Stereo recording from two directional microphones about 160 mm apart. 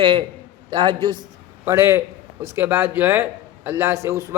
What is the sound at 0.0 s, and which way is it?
A man's voice, 35° right (ahead or behind).